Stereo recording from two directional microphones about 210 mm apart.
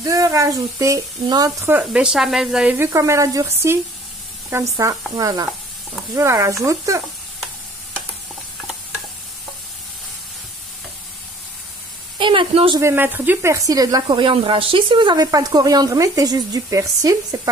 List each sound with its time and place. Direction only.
0.0 s speech: 15° right (ahead or behind)
12.2 s a woman's voice: 25° right (ahead or behind)
12.8 s speech: 10° right (ahead or behind)